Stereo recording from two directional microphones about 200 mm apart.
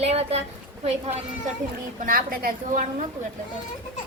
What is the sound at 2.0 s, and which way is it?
A woman's voice, 45° right (ahead or behind).